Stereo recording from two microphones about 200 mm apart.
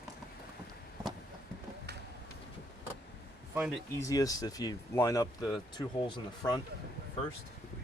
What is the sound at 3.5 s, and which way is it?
Speech, 5° right (ahead or behind).